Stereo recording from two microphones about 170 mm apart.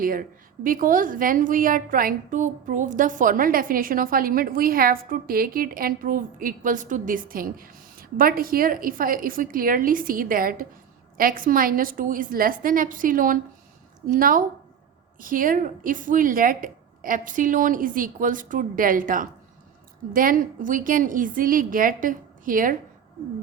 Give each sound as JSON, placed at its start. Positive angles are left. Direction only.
{"t": 0.0, "sound": "a woman's voice", "side_deg": -55}